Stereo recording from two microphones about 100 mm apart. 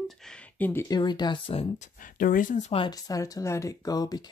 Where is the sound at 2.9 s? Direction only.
35° left (ahead or behind).